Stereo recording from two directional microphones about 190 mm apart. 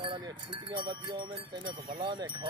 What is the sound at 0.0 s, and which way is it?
Speech, 20° right (ahead or behind).